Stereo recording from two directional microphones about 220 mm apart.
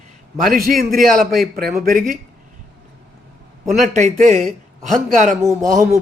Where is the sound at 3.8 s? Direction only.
35° right (ahead or behind).